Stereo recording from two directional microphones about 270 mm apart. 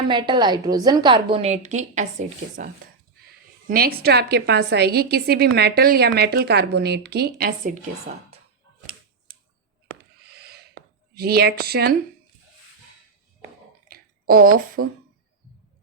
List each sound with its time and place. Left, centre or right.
0.1 s a woman's voice: centre
3.7 s a woman's voice: right
10.0 s owl: right
11.2 s a woman's voice: right
13.8 s a sound: right
14.8 s speech: right